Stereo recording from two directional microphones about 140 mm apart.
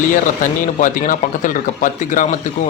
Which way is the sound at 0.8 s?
70° left (ahead or behind).